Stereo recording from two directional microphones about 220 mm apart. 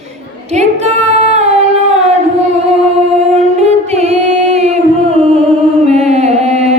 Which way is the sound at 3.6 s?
30° right (ahead or behind).